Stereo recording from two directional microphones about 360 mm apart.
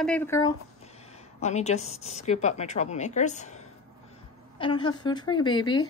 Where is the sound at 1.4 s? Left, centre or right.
Centre.